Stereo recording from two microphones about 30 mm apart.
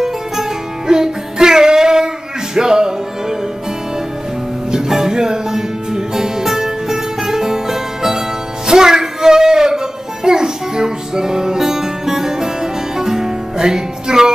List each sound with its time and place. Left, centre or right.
0.8 s music: right
4.6 s music: centre